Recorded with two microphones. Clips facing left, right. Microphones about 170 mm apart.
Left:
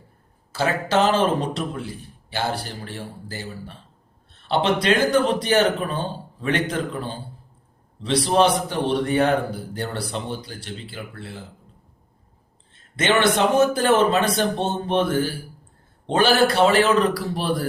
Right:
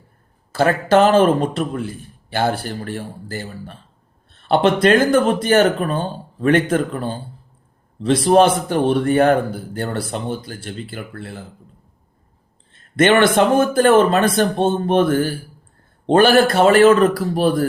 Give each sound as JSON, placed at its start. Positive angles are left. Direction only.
{"t": 0.5, "sound": "speech", "side_deg": -55}
{"t": 13.0, "sound": "speech", "side_deg": -50}